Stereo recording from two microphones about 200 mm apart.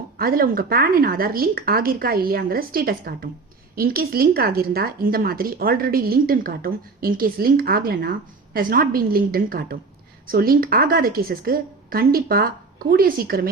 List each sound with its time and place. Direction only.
0.2 s speech: 45° right (ahead or behind)